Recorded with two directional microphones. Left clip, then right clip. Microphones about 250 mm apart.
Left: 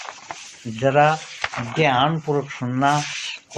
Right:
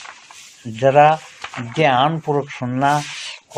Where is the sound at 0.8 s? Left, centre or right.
Right.